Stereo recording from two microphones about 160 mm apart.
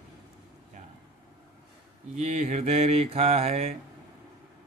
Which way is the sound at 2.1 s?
50° right (ahead or behind).